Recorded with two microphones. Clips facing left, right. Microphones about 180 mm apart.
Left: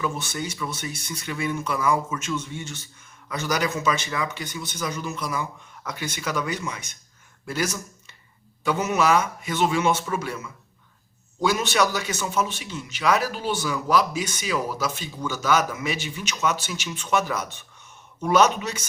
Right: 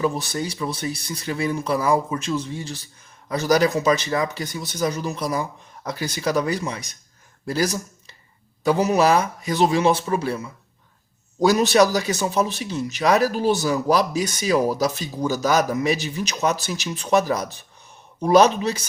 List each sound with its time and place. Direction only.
0.0 s a man's voice: 35° right (ahead or behind)